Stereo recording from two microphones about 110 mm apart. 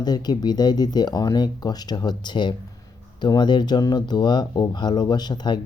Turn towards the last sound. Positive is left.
turn(degrees=40)  # may be behind; listen again after turning